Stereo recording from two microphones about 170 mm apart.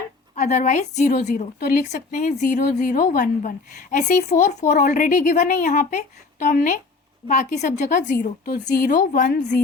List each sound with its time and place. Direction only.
0.3 s a woman's voice: 45° left (ahead or behind)